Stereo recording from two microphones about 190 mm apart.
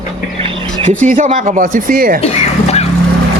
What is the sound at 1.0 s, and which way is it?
Speech, 40° right (ahead or behind).